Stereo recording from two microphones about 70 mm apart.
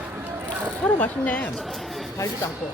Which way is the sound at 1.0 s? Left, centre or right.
Left.